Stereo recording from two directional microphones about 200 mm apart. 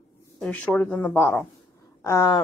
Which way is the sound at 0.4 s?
5° left (ahead or behind).